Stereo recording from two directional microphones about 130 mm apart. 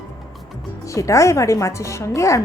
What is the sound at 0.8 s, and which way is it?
A woman's voice, 25° left (ahead or behind).